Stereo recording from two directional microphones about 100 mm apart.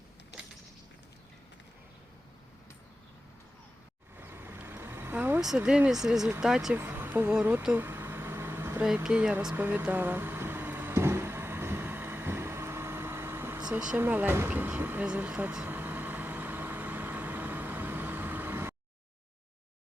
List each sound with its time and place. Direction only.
4.2 s vehicle: 20° right (ahead or behind)
5.4 s speech: 5° right (ahead or behind)
6.7 s speech: 20° right (ahead or behind)
7.9 s vehicle: 20° right (ahead or behind)
9.0 s speech: 10° right (ahead or behind)
9.6 s vehicle: 15° right (ahead or behind)
13.7 s a sound: 10° right (ahead or behind)